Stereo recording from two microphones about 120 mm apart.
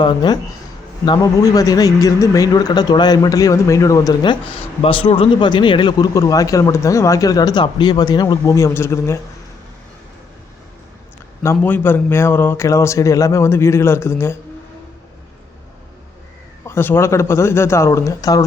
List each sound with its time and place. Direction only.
0.0 s speech: 40° left (ahead or behind)
6.1 s speech: 30° left (ahead or behind)
11.6 s speech: 15° left (ahead or behind)
16.6 s speech: 20° left (ahead or behind)